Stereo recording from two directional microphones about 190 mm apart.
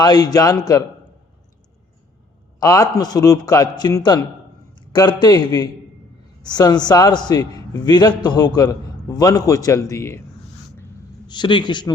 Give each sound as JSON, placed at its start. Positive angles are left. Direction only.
{"t": 0.0, "sound": "a man's voice", "side_deg": 20}
{"t": 2.6, "sound": "a man's voice", "side_deg": 20}
{"t": 11.3, "sound": "a man's voice", "side_deg": 25}